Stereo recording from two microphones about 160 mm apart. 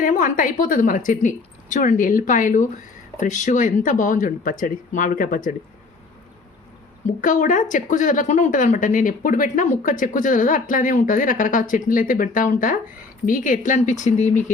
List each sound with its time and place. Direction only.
0.0 s speech: 55° left (ahead or behind)
7.2 s speech: 55° left (ahead or behind)